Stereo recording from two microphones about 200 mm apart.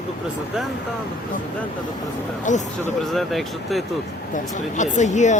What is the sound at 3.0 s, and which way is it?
Speech, centre (ahead or behind).